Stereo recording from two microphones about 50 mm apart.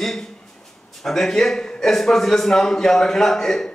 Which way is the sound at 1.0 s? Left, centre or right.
Centre.